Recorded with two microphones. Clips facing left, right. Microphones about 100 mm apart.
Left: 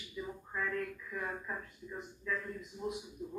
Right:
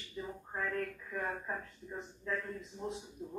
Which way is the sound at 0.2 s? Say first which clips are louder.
Even; 30° right (ahead or behind).